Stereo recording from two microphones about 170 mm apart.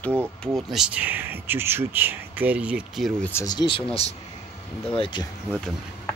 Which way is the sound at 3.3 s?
20° left (ahead or behind).